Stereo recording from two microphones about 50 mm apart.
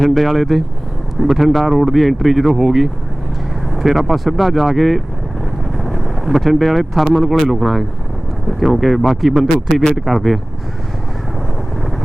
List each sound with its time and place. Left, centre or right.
0.0 s speech: centre